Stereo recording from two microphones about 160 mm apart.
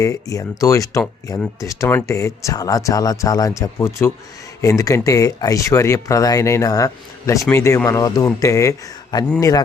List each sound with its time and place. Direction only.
0.0 s speech: 20° left (ahead or behind)